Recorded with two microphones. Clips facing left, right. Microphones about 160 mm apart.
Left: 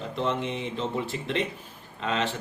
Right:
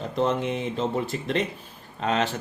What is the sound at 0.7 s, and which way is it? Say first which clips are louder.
A man's voice: right 3 dB; 45° right (ahead or behind).